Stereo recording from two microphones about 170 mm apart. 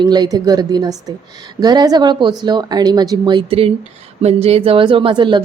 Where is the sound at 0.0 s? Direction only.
25° right (ahead or behind).